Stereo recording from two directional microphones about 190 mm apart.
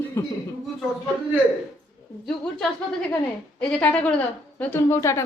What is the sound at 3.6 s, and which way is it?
A woman's voice, 5° left (ahead or behind).